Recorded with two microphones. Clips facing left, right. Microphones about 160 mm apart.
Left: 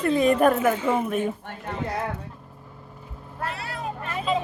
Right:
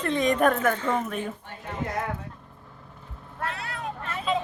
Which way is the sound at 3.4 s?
Centre (ahead or behind).